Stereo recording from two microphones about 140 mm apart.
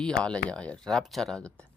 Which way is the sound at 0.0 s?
5° left (ahead or behind).